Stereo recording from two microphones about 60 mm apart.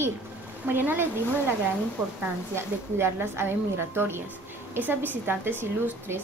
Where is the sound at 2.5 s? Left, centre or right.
Right.